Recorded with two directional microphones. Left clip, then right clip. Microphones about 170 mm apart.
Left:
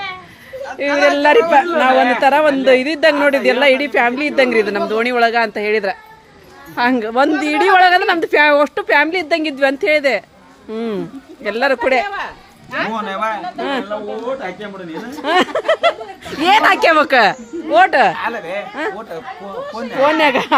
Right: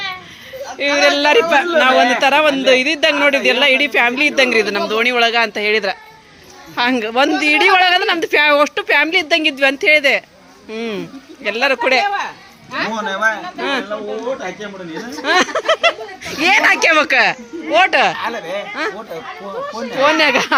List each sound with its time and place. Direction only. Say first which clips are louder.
0.8 s speech: even; 20° left (ahead or behind)
12.0 s speech: right 4 dB; 55° right (ahead or behind)
12.9 s speech: right 6 dB; 10° left (ahead or behind)
15.2 s speech: even; 20° left (ahead or behind)
18.3 s speech: even; 5° right (ahead or behind)
18.7 s speech: right 2 dB; 20° left (ahead or behind)
20.0 s speech: even; 10° left (ahead or behind)